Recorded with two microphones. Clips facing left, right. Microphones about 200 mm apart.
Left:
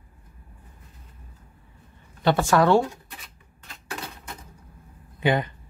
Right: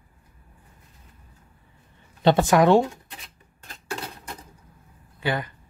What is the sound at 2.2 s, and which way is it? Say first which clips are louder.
Speech: right 2 dB; 20° right (ahead or behind).